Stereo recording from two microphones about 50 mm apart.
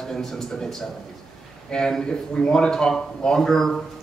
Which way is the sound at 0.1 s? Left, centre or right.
Centre.